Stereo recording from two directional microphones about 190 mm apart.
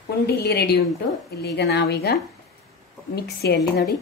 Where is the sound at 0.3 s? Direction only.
55° left (ahead or behind).